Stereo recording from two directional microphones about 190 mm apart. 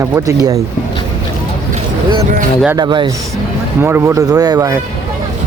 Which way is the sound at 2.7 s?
25° right (ahead or behind).